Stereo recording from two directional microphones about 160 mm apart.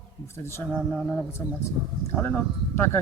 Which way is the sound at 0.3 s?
15° left (ahead or behind).